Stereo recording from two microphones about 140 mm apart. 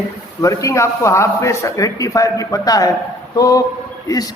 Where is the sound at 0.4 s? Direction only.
25° left (ahead or behind).